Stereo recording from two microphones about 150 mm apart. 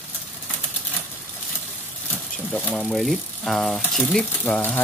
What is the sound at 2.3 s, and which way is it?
Speech, 5° left (ahead or behind).